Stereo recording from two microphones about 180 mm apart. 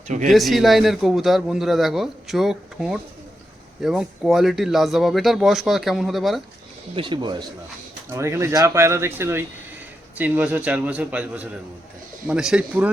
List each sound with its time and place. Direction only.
0.3 s a man's voice: centre (ahead or behind)
6.9 s speech: 25° right (ahead or behind); by 12.9 s 5° right (ahead or behind)